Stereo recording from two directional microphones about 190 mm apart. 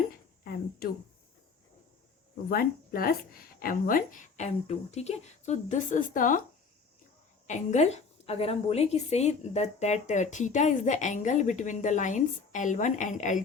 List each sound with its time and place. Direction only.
0.4 s a sound: 55° left (ahead or behind)
2.5 s a woman's voice: 50° left (ahead or behind)
7.4 s a woman's voice: 40° left (ahead or behind)